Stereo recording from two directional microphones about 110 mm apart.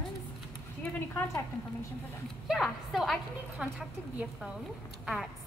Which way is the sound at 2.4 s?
Centre (ahead or behind).